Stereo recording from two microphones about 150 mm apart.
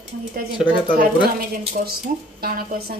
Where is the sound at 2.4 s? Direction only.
80° right.